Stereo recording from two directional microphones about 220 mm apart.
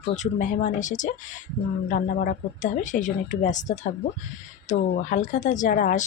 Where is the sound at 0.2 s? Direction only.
35° left (ahead or behind).